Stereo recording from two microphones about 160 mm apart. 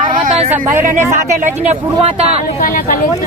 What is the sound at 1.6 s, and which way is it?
Speech, 40° right (ahead or behind).